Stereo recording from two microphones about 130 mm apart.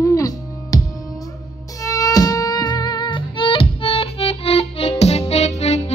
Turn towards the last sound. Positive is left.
turn(degrees=55)  # may be behind; listen again after turning